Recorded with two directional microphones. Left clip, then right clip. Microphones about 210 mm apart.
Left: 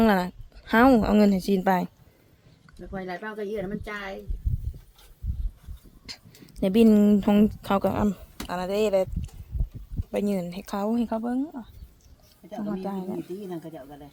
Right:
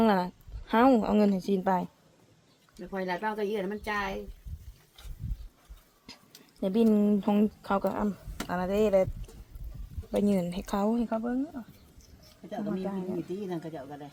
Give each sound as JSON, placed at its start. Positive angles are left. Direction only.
{"t": 0.0, "sound": "speech", "side_deg": 20}
{"t": 2.9, "sound": "speech", "side_deg": -30}
{"t": 6.1, "sound": "a sound", "side_deg": 30}
{"t": 6.6, "sound": "speech", "side_deg": 30}
{"t": 10.1, "sound": "speech", "side_deg": 15}
{"t": 12.5, "sound": "speech", "side_deg": 10}